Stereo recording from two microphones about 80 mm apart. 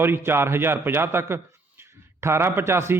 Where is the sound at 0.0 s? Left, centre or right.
Right.